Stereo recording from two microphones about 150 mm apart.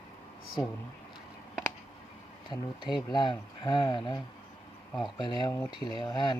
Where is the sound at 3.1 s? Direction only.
30° left (ahead or behind).